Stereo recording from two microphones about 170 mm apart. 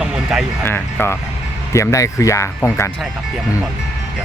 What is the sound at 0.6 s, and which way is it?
Speech, 15° left (ahead or behind).